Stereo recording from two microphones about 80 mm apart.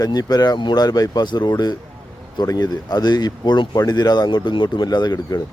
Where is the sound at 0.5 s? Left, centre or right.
Left.